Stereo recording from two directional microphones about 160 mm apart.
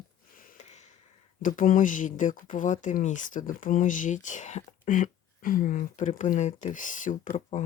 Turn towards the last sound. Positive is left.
turn(degrees=50)  # may be behind; listen again after turning